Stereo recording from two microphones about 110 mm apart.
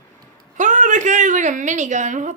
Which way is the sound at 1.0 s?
90° right.